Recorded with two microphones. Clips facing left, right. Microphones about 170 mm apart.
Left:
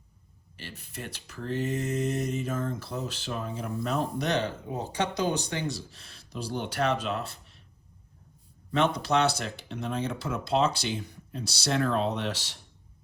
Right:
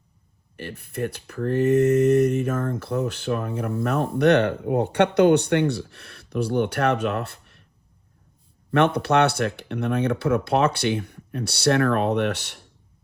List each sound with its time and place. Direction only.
0.5 s speech: 55° right (ahead or behind)
8.7 s speech: 60° right (ahead or behind)